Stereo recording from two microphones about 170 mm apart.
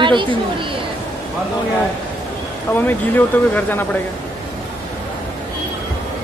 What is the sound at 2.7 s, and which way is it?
A woman's voice, 10° left (ahead or behind).